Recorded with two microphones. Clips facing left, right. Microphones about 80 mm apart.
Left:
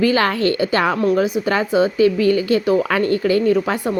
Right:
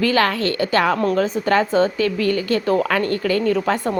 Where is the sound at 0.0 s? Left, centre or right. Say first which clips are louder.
Left 2 dB; left.